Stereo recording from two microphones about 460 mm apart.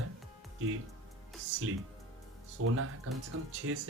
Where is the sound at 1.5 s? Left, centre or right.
Right.